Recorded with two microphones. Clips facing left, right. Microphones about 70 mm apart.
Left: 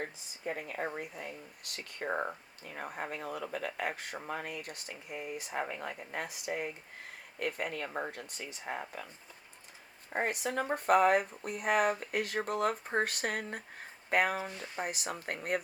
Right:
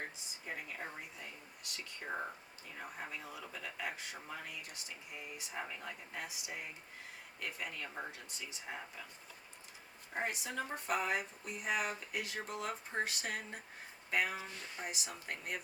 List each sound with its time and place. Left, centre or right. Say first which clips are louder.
0.0 s speech: left 7 dB; left
10.1 s speech: left 6 dB; left